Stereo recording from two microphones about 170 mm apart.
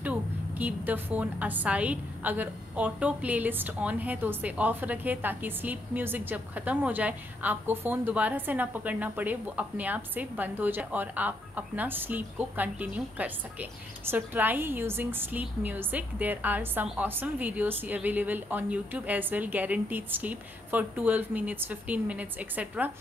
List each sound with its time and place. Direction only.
0.0 s a woman's voice: 10° right (ahead or behind)